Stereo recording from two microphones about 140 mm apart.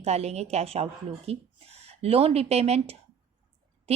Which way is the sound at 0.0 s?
50° right (ahead or behind).